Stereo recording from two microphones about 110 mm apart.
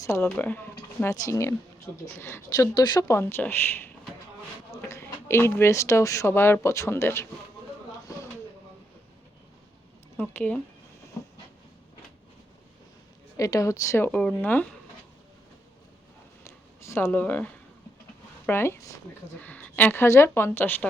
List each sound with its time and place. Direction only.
0.0 s speech: 25° left (ahead or behind)
1.1 s speech: 30° left (ahead or behind)
2.6 s speech: 40° left (ahead or behind); by 7.3 s 25° left (ahead or behind)
10.2 s speech: 15° left (ahead or behind)
11.2 s train: 30° left (ahead or behind)
13.3 s speech: 30° left (ahead or behind)
14.1 s speech: 10° left (ahead or behind)
16.4 s a sound: 25° left (ahead or behind)
17.1 s speech: 15° left (ahead or behind)
19.4 s speech: 15° left (ahead or behind)